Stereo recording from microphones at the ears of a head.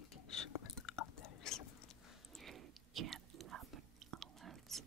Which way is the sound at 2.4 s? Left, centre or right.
Right.